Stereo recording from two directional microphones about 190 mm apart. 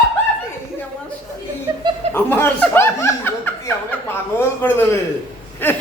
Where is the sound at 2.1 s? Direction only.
10° left (ahead or behind).